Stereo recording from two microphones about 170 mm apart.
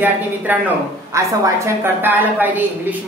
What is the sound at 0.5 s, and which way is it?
A man's voice, 10° right (ahead or behind).